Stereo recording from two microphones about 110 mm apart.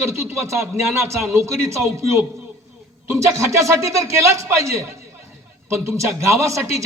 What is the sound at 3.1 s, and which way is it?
A man's voice, 25° right (ahead or behind).